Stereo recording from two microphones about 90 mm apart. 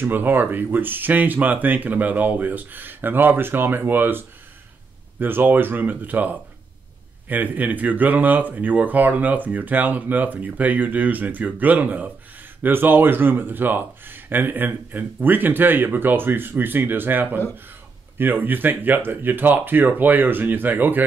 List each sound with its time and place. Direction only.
0.0 s speech: 25° right (ahead or behind)